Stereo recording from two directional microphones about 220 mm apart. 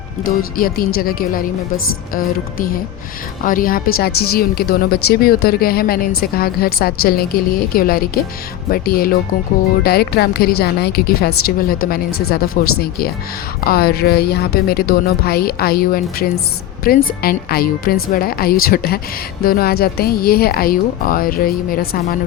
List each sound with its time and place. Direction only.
0.2 s music: 40° left (ahead or behind)
3.4 s music: 40° left (ahead or behind)
3.9 s a woman's voice: 45° left (ahead or behind)
8.7 s music: 40° left (ahead or behind)
9.8 s a woman's voice: 45° left (ahead or behind)
12.6 s music: 40° left (ahead or behind)
13.6 s a woman's voice: 45° left (ahead or behind)